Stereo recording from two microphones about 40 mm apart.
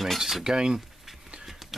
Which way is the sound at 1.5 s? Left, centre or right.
Centre.